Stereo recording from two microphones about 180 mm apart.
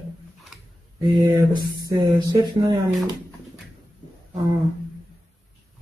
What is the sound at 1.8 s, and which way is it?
Speech, 20° right (ahead or behind).